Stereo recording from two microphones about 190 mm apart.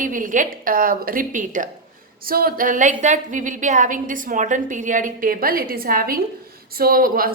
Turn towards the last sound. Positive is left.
turn(degrees=-50)  # may be behind; listen again after turning